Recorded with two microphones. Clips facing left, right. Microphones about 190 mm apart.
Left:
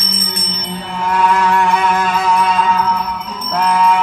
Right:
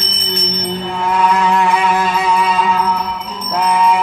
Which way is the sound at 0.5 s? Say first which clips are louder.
Right 6 dB; 45° right (ahead or behind).